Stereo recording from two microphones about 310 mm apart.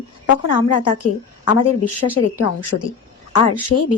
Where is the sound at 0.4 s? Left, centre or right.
Left.